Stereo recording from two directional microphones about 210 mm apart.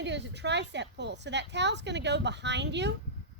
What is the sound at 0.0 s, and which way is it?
Speech, 55° right (ahead or behind).